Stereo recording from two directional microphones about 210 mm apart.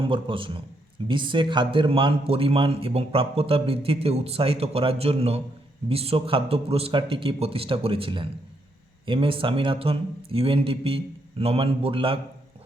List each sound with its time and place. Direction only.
0.0 s speech: 25° right (ahead or behind)